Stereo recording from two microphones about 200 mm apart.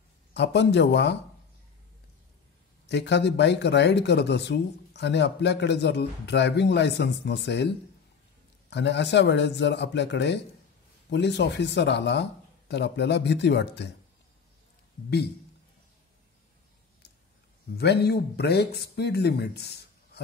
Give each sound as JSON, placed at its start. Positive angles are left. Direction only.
{"t": 0.3, "sound": "speech", "side_deg": 60}
{"t": 2.9, "sound": "speech", "side_deg": 60}
{"t": 17.7, "sound": "speech", "side_deg": 55}